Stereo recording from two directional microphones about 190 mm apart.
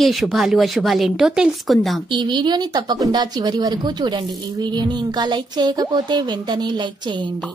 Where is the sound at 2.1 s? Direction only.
25° right (ahead or behind).